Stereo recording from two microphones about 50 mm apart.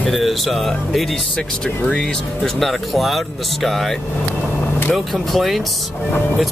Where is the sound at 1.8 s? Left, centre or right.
Left.